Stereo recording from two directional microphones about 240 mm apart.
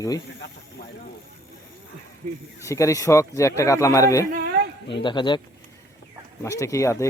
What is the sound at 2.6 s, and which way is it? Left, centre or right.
Speech, centre.